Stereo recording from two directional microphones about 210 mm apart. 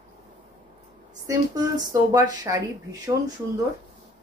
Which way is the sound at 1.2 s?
15° right (ahead or behind).